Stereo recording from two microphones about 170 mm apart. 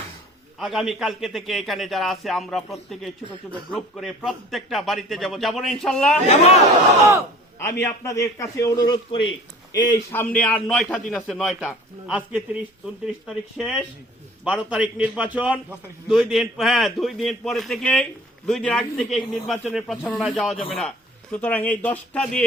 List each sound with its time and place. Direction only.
0.6 s a man's voice: centre (ahead or behind)
6.2 s speech: 40° left (ahead or behind)
7.8 s a man's voice: 15° left (ahead or behind)
9.7 s a man's voice: 15° left (ahead or behind)